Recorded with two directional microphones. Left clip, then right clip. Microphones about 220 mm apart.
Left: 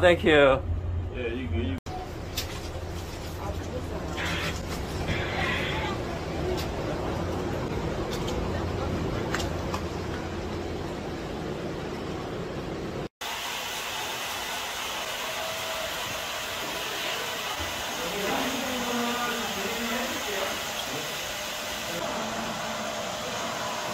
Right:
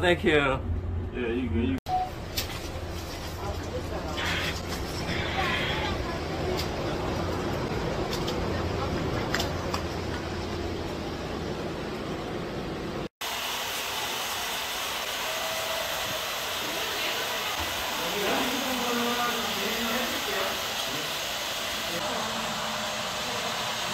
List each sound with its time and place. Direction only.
0.0 s speech: 10° left (ahead or behind)